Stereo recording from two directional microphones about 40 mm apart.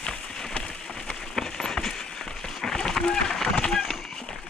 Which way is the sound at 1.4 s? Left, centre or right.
Centre.